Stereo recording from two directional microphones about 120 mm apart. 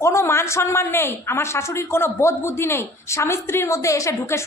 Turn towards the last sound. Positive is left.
turn(degrees=25)  # may be behind; listen again after turning